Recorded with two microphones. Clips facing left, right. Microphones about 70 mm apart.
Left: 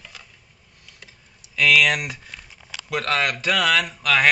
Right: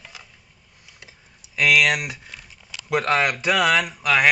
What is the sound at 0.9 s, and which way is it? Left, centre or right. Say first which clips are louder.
Typing: even; centre.